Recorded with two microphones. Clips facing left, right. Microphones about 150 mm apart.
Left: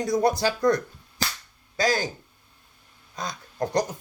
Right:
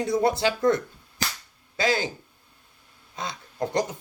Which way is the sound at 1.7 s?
45° left (ahead or behind).